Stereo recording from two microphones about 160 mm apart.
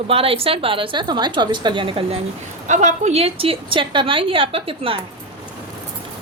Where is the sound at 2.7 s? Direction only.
50° right (ahead or behind).